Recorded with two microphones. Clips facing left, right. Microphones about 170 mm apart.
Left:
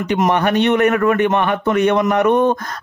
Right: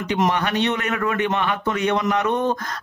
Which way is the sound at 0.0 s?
50° left (ahead or behind).